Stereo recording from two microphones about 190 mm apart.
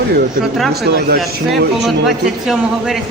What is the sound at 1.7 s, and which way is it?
A man's voice, centre (ahead or behind).